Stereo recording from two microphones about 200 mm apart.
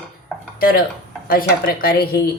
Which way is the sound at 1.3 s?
45° left (ahead or behind).